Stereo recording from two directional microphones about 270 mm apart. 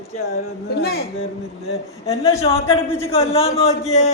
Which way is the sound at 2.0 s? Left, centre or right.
Centre.